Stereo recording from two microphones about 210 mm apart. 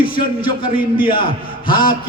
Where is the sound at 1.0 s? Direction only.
25° left (ahead or behind).